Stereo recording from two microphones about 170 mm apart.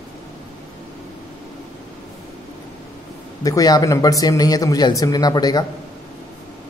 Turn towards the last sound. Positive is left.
turn(degrees=25)  # may be behind; listen again after turning